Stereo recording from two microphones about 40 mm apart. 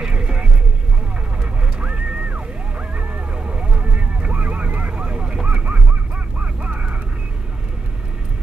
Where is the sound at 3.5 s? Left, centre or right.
Right.